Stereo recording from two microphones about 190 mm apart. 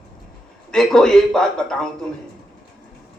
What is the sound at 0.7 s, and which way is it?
A man's voice, 5° left (ahead or behind).